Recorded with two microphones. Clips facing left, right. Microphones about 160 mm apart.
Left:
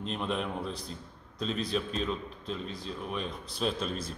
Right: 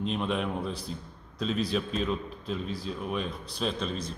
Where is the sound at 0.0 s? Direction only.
Centre (ahead or behind).